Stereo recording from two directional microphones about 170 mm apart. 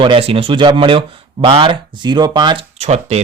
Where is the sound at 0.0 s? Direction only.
35° right (ahead or behind).